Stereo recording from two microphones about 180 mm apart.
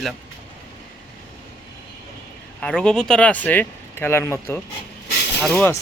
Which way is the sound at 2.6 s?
5° left (ahead or behind).